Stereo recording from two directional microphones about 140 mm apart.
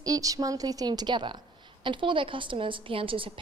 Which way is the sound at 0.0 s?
25° right (ahead or behind).